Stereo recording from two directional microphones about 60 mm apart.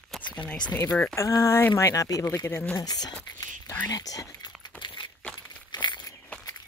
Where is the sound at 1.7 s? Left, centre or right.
Left.